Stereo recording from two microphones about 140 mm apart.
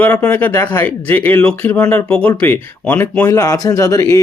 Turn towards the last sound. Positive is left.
turn(degrees=25)  # may be behind; listen again after turning